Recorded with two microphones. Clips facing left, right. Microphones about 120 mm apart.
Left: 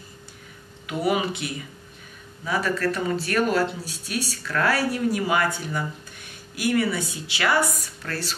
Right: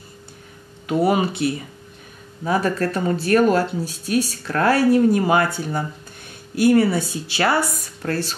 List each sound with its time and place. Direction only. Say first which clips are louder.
0.8 s speech: right 5 dB; 35° right (ahead or behind)